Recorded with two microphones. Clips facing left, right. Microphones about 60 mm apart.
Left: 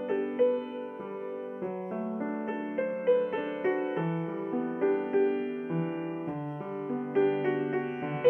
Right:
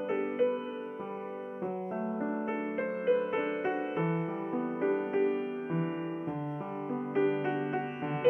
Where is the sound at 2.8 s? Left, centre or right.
Right.